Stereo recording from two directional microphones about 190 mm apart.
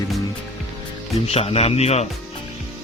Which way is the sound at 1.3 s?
30° left (ahead or behind).